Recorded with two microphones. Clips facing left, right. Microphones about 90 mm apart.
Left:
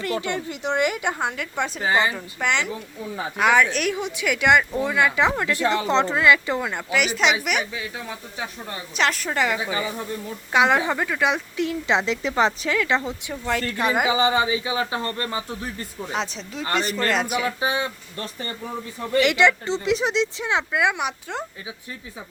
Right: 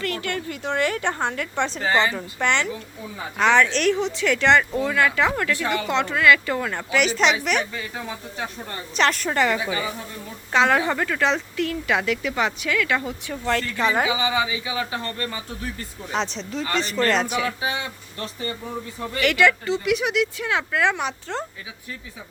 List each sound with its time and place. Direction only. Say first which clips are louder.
0.0 s a woman's voice: left 1 dB; 20° left (ahead or behind)
6.9 s a woman's voice: right 1 dB; 5° left (ahead or behind)
9.6 s speech: even; 20° left (ahead or behind)
13.4 s speech: right 1 dB; 10° left (ahead or behind)
14.1 s speech: left 3 dB; 35° left (ahead or behind)
16.1 s a woman's voice: right 3 dB; 5° left (ahead or behind)
17.4 s speech: left 2 dB; 25° left (ahead or behind)
19.2 s speech: right 1 dB; 20° left (ahead or behind)